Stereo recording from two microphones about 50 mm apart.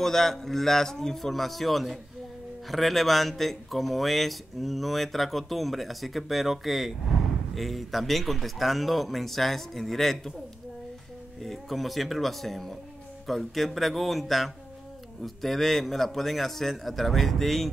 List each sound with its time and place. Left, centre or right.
0.0 s speech: centre
11.4 s speech: centre